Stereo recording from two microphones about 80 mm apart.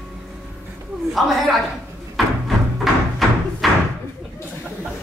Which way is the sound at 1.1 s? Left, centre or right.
Centre.